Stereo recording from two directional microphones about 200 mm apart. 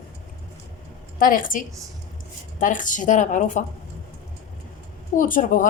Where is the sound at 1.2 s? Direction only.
45° left (ahead or behind).